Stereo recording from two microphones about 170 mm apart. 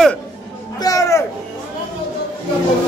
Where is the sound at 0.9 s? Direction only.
20° left (ahead or behind).